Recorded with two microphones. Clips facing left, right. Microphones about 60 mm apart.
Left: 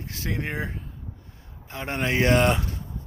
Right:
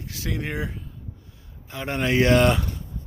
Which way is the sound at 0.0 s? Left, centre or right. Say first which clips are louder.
Even; left.